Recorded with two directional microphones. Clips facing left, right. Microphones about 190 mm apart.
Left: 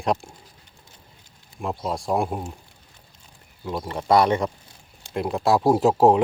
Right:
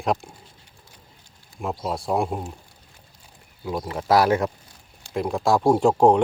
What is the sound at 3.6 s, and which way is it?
Speech, centre (ahead or behind).